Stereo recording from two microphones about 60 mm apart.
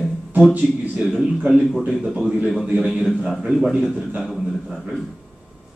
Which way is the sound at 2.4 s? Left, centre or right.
Centre.